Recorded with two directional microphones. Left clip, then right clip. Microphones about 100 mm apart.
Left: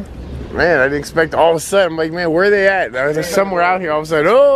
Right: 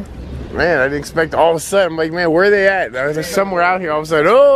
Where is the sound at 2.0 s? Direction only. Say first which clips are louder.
Right 2 dB; 10° right (ahead or behind).